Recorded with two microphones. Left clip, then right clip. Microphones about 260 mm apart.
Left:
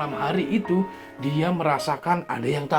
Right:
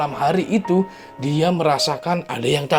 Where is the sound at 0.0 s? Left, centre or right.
Right.